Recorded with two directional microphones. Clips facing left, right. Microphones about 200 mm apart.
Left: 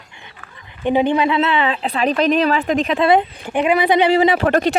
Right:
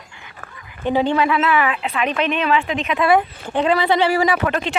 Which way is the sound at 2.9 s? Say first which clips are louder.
Right 1 dB; 20° left (ahead or behind).